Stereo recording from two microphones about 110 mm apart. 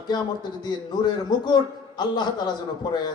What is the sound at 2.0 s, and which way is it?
Speech, 40° left (ahead or behind).